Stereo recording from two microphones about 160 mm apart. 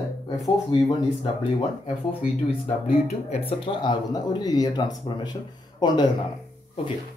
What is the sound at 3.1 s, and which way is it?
Speech, 40° left (ahead or behind).